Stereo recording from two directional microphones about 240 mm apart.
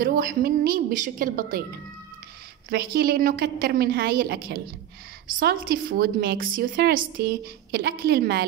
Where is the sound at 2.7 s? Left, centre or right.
Right.